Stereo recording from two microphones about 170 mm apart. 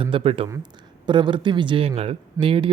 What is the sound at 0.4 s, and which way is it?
Speech, 20° right (ahead or behind).